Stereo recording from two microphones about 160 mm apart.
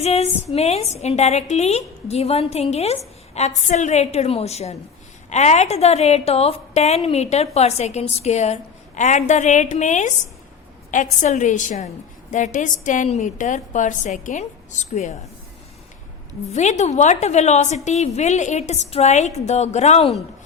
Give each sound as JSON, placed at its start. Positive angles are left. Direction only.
{"t": 0.0, "sound": "a woman's voice", "side_deg": 40}
{"t": 16.5, "sound": "a woman's voice", "side_deg": 45}